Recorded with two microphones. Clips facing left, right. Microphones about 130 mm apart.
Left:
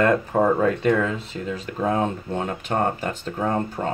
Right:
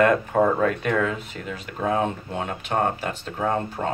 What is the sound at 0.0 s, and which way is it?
Speech, 30° left (ahead or behind).